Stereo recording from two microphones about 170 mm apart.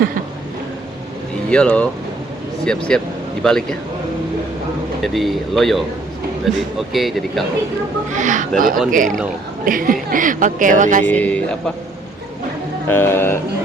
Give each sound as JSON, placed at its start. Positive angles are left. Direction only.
{"t": 1.5, "sound": "a man's voice", "side_deg": 5}
{"t": 5.1, "sound": "speech", "side_deg": 0}
{"t": 8.1, "sound": "speech", "side_deg": -50}
{"t": 11.0, "sound": "a man's voice", "side_deg": 10}
{"t": 12.9, "sound": "a man's voice", "side_deg": 15}